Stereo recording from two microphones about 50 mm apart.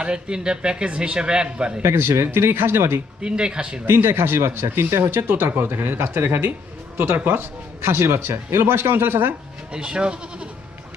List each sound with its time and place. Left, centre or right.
0.0 s a man's voice: centre
1.8 s speech: right
3.2 s a man's voice: centre
3.8 s a man's voice: right
7.9 s speech: right
9.7 s a man's voice: centre